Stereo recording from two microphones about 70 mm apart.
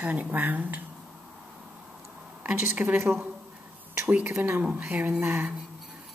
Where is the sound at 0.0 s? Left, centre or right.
Right.